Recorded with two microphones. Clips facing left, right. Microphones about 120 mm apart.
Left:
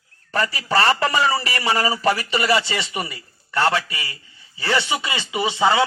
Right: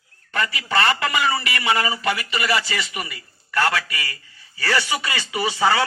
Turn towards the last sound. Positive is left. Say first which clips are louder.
# left 1 dB
turn(degrees=20)  # may be behind; listen again after turning